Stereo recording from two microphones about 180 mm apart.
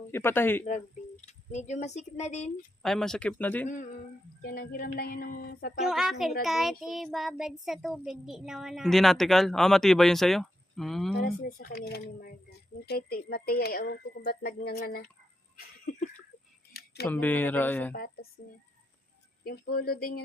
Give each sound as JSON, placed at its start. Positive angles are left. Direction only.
{"t": 0.1, "sound": "speech", "side_deg": 15}
{"t": 0.6, "sound": "speech", "side_deg": 40}
{"t": 2.8, "sound": "speech", "side_deg": 0}
{"t": 4.4, "sound": "speech", "side_deg": 60}
{"t": 5.8, "sound": "child singing", "side_deg": 0}
{"t": 11.2, "sound": "speech", "side_deg": 55}
{"t": 15.5, "sound": "a sound", "side_deg": 55}
{"t": 17.1, "sound": "speech", "side_deg": 10}
{"t": 17.9, "sound": "speech", "side_deg": 60}
{"t": 19.5, "sound": "speech", "side_deg": 60}